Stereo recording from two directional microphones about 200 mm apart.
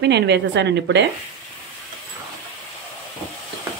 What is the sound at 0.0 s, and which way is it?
Speech, 60° right (ahead or behind).